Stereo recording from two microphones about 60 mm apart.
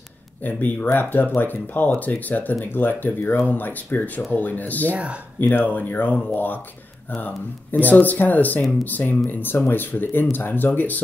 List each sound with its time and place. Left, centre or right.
0.4 s speech: left
4.9 s speech: right
5.4 s speech: left